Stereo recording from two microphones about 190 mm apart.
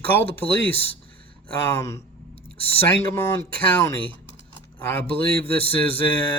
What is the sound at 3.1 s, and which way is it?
Speech, 10° left (ahead or behind).